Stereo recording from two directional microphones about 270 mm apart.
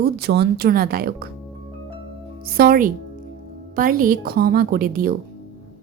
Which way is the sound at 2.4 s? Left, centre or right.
Right.